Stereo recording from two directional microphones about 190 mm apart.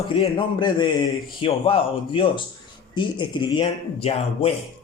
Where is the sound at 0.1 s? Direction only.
25° left (ahead or behind).